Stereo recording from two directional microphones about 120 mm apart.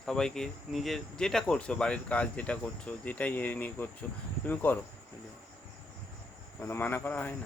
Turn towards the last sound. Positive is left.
turn(degrees=15)  # may be behind; listen again after turning